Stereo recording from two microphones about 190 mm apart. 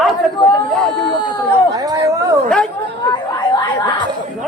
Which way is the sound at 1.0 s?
25° left (ahead or behind).